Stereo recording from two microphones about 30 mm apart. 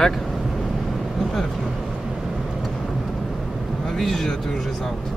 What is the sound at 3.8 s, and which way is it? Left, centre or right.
Speech, centre.